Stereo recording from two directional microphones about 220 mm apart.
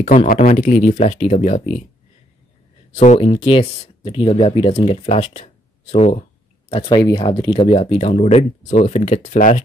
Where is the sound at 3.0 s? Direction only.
30° left (ahead or behind).